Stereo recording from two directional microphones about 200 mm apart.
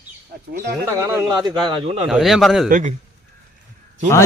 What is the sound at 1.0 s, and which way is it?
Speech, 15° right (ahead or behind).